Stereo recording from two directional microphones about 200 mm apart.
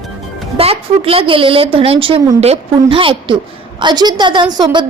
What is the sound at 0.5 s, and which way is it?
A woman's voice, 30° right (ahead or behind).